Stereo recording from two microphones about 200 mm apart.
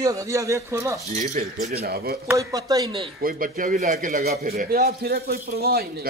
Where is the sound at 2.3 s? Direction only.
15° right (ahead or behind).